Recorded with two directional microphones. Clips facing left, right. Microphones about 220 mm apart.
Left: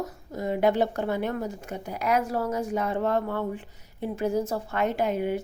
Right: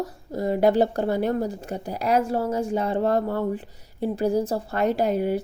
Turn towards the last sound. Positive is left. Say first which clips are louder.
# right 4 dB
turn(degrees=-35)  # may be behind; listen again after turning